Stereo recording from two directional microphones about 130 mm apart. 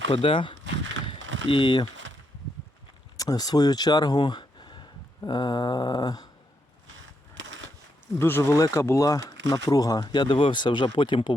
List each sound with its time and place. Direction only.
0.1 s speech: 45° left (ahead or behind)
1.0 s a sound: 40° left (ahead or behind)
3.2 s speech: 30° left (ahead or behind)
8.2 s speech: 20° left (ahead or behind); by 11.3 s 35° left (ahead or behind)